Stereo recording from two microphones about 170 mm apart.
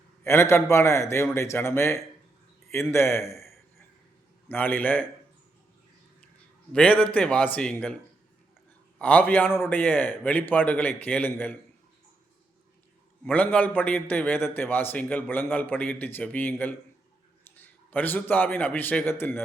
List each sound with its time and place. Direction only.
0.3 s a man's voice: 15° left (ahead or behind)
4.4 s a man's voice: 10° left (ahead or behind)
6.7 s a man's voice: 5° left (ahead or behind)
9.0 s a man's voice: 10° left (ahead or behind)
13.2 s a man's voice: 10° left (ahead or behind)